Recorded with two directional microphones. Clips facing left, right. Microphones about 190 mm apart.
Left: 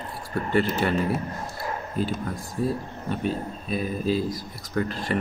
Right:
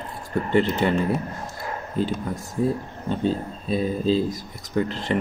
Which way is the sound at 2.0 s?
20° right (ahead or behind).